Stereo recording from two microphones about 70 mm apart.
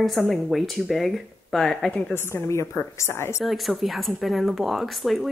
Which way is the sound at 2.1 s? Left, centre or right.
Left.